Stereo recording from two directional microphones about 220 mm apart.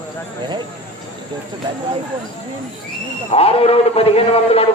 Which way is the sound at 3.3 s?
25° left (ahead or behind).